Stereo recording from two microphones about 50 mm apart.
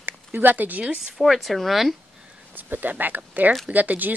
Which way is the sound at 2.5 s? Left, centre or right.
Right.